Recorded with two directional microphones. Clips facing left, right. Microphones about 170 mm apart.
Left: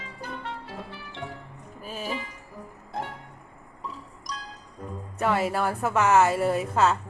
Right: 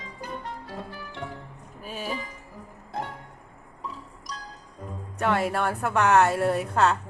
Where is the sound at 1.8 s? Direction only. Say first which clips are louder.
Even; centre (ahead or behind).